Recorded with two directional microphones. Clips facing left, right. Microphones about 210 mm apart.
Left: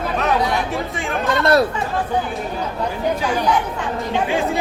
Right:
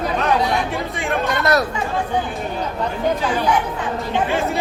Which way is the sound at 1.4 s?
30° left (ahead or behind).